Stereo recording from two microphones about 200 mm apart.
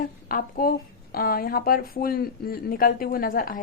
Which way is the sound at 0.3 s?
45° left (ahead or behind).